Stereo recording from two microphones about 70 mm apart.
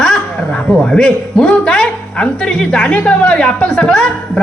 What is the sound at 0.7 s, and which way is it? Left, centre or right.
Speech, centre.